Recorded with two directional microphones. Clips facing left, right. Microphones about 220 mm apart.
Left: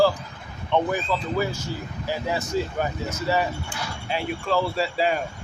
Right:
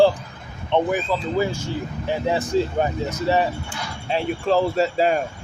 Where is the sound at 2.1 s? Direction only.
30° right (ahead or behind); by 5.1 s 45° right (ahead or behind).